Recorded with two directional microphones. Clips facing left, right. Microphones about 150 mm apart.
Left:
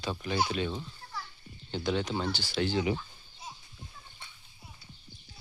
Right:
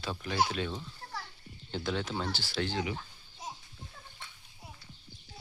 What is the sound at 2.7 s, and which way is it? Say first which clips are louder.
Speech: left 5 dB; 25° left (ahead or behind).